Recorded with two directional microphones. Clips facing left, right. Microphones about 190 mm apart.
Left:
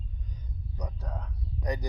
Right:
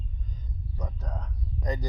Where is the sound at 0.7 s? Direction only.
10° left (ahead or behind).